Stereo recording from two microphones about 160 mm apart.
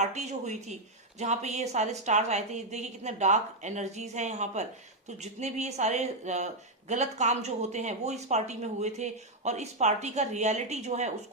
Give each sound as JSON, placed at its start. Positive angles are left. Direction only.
{"t": 0.0, "sound": "speech", "side_deg": -45}